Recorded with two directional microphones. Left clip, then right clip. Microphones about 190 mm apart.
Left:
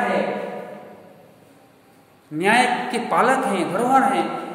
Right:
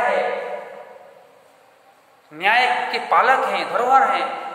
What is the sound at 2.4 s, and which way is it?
A man's voice, 20° left (ahead or behind).